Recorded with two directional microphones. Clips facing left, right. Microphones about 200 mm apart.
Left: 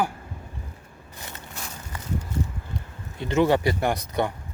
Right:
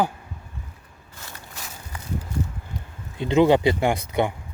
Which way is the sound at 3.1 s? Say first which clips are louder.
Right 4 dB; 15° right (ahead or behind).